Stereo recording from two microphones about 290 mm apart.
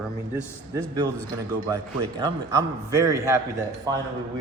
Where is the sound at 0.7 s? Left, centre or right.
Centre.